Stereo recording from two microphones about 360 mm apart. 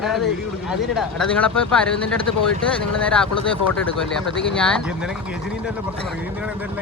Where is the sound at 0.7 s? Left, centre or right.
Centre.